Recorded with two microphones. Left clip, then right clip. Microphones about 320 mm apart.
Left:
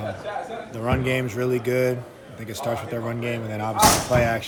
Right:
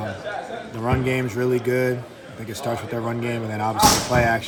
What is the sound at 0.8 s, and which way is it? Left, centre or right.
Speech, centre.